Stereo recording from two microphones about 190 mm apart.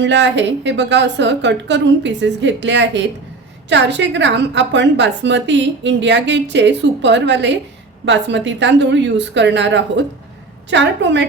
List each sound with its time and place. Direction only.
0.0 s a woman's voice: 70° right (ahead or behind)